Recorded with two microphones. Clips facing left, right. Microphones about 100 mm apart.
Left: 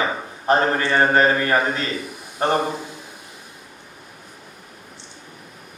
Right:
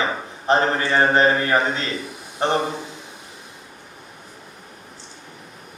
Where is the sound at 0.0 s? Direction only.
25° right (ahead or behind).